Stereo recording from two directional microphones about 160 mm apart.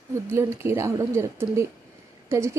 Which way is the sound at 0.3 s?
15° right (ahead or behind).